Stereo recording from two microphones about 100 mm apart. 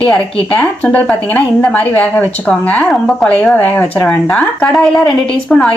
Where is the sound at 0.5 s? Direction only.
15° left (ahead or behind).